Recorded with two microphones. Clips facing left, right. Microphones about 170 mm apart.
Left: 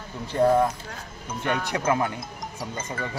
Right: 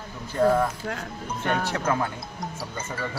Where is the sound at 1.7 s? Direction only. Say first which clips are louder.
Left 2 dB; 15° left (ahead or behind).